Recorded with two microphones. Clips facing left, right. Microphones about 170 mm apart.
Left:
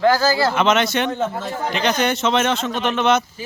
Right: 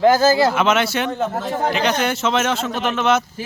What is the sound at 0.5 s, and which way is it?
Speech, 5° right (ahead or behind).